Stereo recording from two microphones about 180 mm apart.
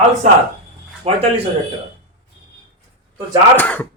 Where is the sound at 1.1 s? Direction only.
35° right (ahead or behind).